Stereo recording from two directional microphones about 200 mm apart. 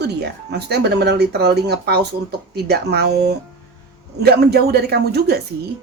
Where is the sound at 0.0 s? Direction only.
55° right (ahead or behind).